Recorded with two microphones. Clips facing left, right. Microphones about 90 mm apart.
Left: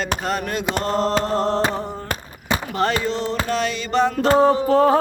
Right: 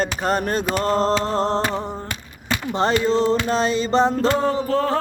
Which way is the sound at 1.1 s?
45° left (ahead or behind).